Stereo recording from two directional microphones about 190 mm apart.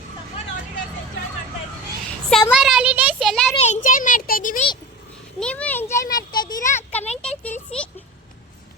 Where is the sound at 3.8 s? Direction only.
45° left (ahead or behind).